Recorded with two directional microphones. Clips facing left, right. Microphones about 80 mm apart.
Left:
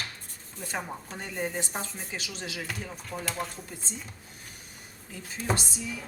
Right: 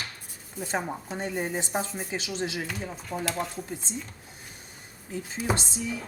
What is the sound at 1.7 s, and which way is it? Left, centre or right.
Speech, centre.